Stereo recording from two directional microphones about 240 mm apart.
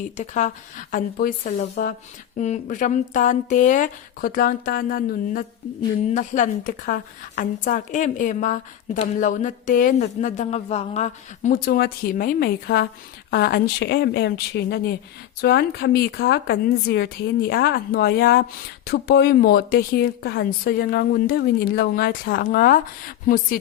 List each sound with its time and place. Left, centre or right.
0.2 s a woman's voice: left